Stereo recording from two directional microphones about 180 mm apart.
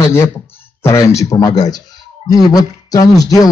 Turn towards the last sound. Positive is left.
turn(degrees=20)  # may be behind; listen again after turning